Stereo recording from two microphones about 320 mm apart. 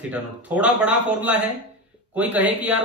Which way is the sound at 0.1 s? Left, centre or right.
Centre.